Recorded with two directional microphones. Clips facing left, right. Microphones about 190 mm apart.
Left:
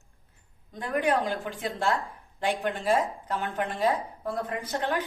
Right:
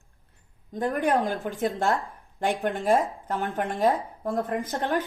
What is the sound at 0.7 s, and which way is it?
Speech, 45° right (ahead or behind).